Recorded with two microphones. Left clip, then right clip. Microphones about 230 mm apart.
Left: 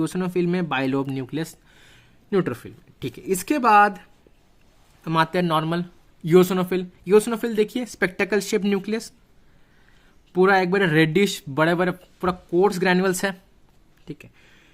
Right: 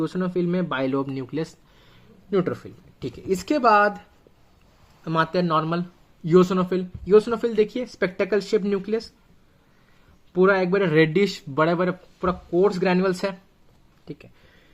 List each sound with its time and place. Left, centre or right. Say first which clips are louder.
0.0 s speech: left 1 dB; left
5.0 s speech: left 1 dB; left
10.3 s speech: left 1 dB; left